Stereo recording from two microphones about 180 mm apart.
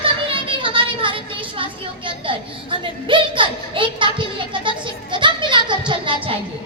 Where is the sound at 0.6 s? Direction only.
30° right (ahead or behind).